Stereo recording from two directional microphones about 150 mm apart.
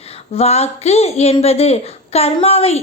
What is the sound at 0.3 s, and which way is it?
A child's voice, 45° left (ahead or behind).